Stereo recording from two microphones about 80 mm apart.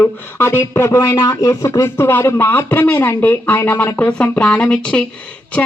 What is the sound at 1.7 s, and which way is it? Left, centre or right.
Speech, left.